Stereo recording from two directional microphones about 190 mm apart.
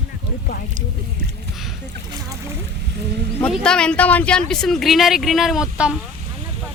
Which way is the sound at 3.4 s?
5° left (ahead or behind).